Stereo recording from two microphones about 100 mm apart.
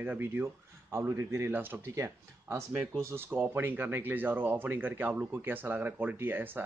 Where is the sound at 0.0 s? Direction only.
20° right (ahead or behind).